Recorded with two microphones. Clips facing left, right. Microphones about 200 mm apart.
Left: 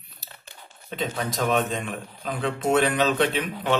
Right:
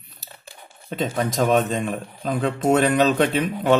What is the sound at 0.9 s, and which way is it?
A man's voice, 45° right (ahead or behind).